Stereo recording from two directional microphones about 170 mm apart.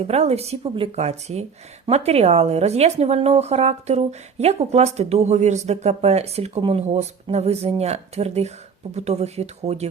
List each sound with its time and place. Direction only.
0.0 s a woman's voice: 35° right (ahead or behind)